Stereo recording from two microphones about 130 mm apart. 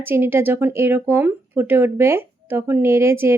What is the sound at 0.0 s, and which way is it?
Speech, 15° right (ahead or behind).